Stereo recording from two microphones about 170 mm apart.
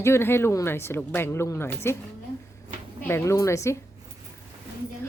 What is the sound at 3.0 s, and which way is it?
Speech, 15° left (ahead or behind).